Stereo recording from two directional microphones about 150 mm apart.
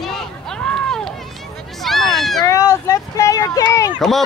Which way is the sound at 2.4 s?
20° left (ahead or behind).